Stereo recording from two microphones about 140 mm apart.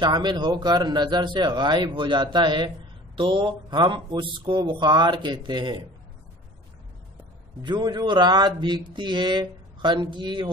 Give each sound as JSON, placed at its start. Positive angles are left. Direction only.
{"t": 0.0, "sound": "speech", "side_deg": -30}
{"t": 7.6, "sound": "speech", "side_deg": -30}